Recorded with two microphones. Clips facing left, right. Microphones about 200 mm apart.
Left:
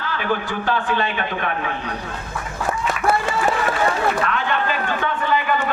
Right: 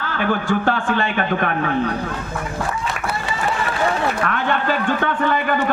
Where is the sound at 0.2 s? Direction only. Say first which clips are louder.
Right 6 dB; 50° right (ahead or behind).